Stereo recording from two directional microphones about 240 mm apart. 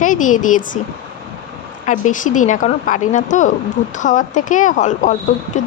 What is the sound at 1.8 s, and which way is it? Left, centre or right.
A woman's voice, left.